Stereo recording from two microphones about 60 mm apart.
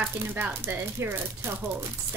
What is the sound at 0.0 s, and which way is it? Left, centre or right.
Speech, right.